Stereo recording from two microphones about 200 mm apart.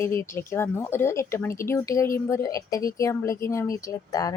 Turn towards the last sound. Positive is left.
turn(degrees=15)  # may be behind; listen again after turning